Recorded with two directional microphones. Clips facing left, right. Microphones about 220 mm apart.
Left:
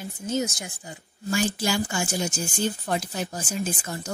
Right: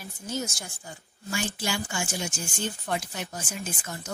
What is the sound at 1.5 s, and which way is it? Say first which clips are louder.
Speech: left 5 dB; 40° left (ahead or behind).